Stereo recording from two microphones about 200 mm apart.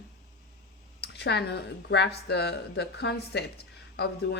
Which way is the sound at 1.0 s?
55° left (ahead or behind).